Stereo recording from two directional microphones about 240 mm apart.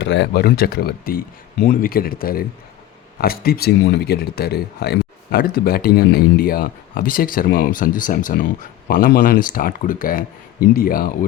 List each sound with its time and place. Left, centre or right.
0.0 s speech: left